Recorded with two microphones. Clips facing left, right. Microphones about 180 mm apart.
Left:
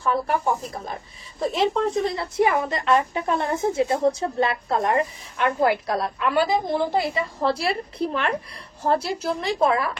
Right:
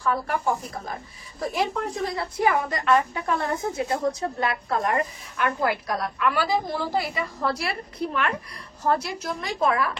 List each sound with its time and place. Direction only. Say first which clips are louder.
0.0 s a woman's voice: left 3 dB; 25° left (ahead or behind)
1.4 s a woman's voice: left 5 dB; 25° left (ahead or behind)